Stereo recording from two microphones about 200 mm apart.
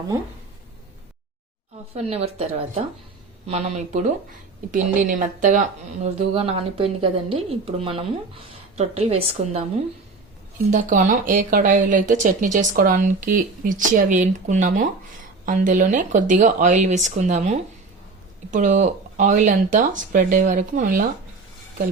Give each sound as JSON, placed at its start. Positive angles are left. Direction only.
{"t": 2.0, "sound": "speech", "side_deg": -30}
{"t": 10.7, "sound": "speech", "side_deg": -40}